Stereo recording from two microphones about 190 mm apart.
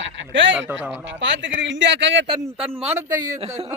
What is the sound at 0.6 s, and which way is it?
Speech, 10° right (ahead or behind).